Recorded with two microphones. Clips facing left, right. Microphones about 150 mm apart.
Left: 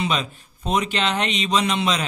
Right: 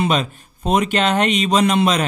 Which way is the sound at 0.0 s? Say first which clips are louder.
Right 5 dB; 50° right (ahead or behind).